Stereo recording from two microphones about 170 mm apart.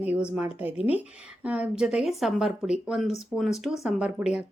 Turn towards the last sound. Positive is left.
turn(degrees=-5)  # may be behind; listen again after turning